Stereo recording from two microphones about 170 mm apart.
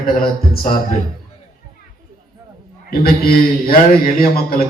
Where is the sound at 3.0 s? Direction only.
60° left (ahead or behind).